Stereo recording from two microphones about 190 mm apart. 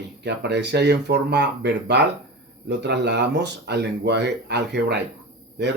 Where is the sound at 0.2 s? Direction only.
65° right (ahead or behind).